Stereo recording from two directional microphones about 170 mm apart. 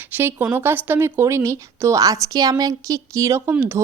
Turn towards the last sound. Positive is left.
turn(degrees=-15)  # may be behind; listen again after turning